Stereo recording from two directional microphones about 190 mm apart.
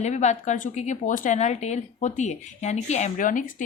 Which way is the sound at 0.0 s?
35° left (ahead or behind).